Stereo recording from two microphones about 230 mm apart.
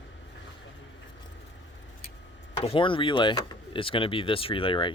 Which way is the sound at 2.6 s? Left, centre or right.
Left.